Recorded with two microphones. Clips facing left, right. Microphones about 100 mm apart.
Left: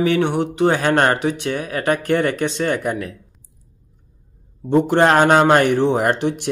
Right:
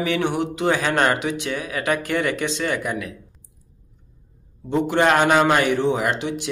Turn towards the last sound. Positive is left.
turn(degrees=55)  # may be behind; listen again after turning